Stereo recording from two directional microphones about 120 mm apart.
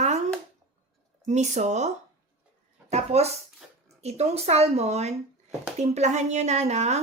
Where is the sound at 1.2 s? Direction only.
75° right (ahead or behind).